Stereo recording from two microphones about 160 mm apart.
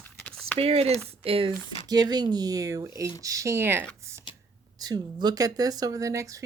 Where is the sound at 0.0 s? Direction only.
5° left (ahead or behind).